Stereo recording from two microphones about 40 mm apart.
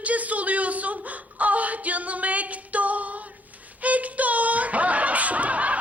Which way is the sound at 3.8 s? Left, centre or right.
Right.